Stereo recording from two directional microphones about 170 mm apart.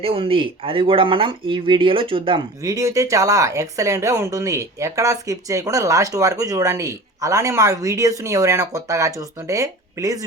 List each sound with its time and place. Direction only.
0.0 s speech: 35° right (ahead or behind)